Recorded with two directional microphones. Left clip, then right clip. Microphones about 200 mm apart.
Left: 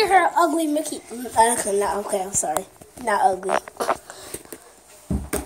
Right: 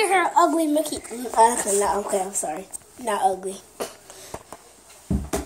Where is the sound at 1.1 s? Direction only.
20° left (ahead or behind).